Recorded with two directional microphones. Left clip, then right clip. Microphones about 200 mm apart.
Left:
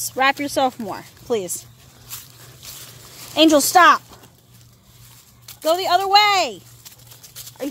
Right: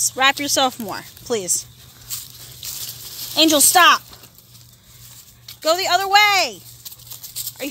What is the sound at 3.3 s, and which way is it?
Speech, 20° left (ahead or behind).